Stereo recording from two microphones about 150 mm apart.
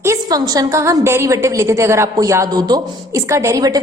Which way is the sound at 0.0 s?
20° right (ahead or behind).